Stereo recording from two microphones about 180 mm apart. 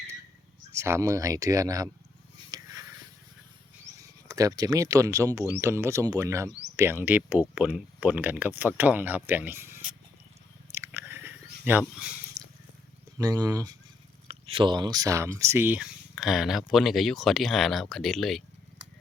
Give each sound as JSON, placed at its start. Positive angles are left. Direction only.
{"t": 0.7, "sound": "speech", "side_deg": -15}
{"t": 2.5, "sound": "a sound", "side_deg": -20}
{"t": 4.0, "sound": "speech", "side_deg": -20}
{"t": 10.7, "sound": "chewing", "side_deg": -15}
{"t": 11.6, "sound": "speech", "side_deg": -10}
{"t": 12.4, "sound": "a sound", "side_deg": -40}
{"t": 13.1, "sound": "speech", "side_deg": -20}
{"t": 14.3, "sound": "speech", "side_deg": -30}